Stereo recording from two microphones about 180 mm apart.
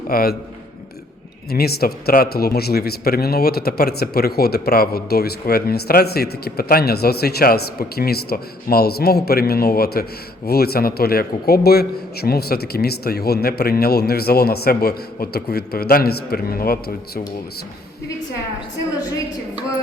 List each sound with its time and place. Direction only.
0.1 s a man's voice: 55° left (ahead or behind)
1.5 s a man's voice: 60° left (ahead or behind)